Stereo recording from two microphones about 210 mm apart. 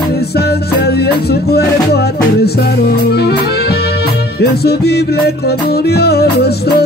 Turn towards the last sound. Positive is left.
turn(degrees=50)  # may be behind; listen again after turning